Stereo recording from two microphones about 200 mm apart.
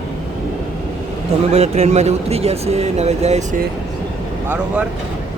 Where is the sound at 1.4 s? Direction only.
30° right (ahead or behind).